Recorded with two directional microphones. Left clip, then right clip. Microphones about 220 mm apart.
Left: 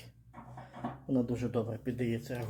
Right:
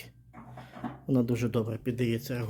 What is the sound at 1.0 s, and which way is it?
Speech, 40° right (ahead or behind).